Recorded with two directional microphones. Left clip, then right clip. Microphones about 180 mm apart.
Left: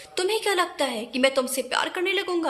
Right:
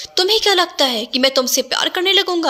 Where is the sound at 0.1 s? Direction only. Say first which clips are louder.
Right 10 dB; 30° right (ahead or behind).